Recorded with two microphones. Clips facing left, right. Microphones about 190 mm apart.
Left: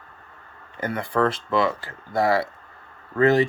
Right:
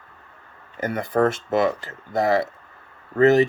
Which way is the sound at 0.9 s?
45° right (ahead or behind).